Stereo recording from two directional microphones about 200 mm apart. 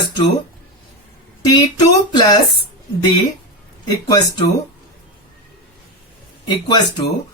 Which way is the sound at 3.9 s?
20° left (ahead or behind).